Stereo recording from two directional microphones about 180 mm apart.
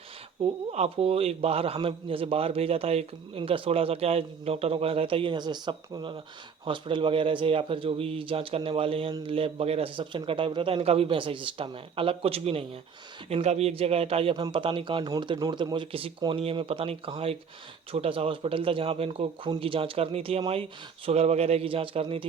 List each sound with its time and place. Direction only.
0.7 s speech: 35° right (ahead or behind)